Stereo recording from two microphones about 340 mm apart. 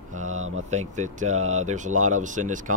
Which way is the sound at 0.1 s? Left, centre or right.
Right.